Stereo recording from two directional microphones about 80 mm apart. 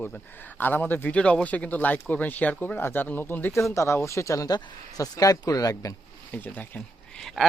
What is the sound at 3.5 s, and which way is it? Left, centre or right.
Speech, left.